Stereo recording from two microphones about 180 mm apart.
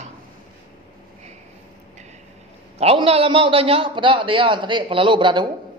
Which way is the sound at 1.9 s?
40° right (ahead or behind).